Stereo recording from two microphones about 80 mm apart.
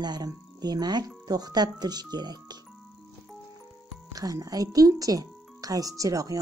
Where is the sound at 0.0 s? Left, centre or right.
Right.